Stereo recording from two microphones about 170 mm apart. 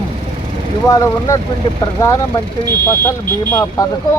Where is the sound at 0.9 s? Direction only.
20° left (ahead or behind).